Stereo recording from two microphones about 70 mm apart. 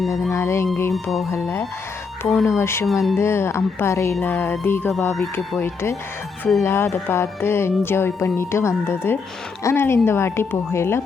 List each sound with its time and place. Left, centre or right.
0.0 s music: centre
0.3 s a woman's voice: left
2.2 s speech: centre
2.5 s a woman's voice: left
2.8 s speech: centre
3.2 s a woman's voice: left